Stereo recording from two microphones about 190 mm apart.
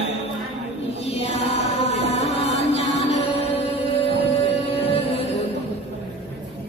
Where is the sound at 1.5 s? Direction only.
35° left (ahead or behind).